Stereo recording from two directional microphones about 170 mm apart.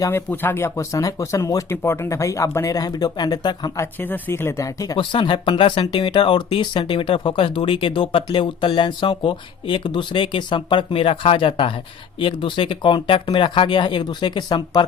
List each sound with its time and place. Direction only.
0.0 s speech: 15° left (ahead or behind)
4.0 s speech: 10° left (ahead or behind)